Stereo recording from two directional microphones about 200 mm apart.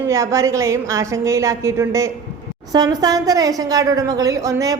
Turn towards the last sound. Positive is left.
turn(degrees=-15)  # may be behind; listen again after turning